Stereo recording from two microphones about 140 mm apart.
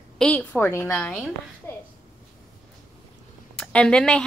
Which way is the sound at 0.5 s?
15° left (ahead or behind).